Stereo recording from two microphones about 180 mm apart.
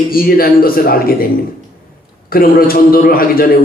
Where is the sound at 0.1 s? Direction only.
55° left (ahead or behind).